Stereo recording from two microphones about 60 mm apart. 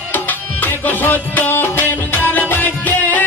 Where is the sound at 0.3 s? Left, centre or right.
Left.